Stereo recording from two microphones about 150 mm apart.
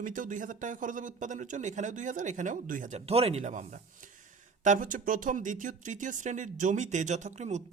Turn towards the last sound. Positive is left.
turn(degrees=-50)  # may be behind; listen again after turning